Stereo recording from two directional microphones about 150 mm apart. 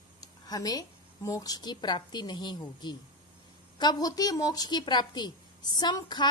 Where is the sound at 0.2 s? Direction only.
25° left (ahead or behind).